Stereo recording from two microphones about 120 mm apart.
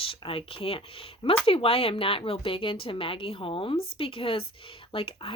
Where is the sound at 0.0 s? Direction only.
50° left (ahead or behind).